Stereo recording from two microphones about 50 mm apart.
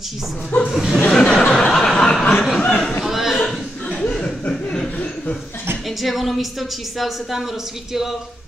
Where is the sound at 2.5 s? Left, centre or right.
Left.